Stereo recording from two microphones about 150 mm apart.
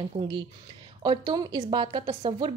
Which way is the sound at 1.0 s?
30° right (ahead or behind).